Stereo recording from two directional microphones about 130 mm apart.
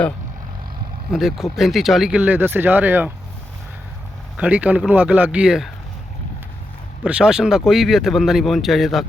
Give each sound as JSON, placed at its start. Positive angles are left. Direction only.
{"t": 1.1, "sound": "speech", "side_deg": 0}
{"t": 4.4, "sound": "speech", "side_deg": -10}
{"t": 7.0, "sound": "speech", "side_deg": -10}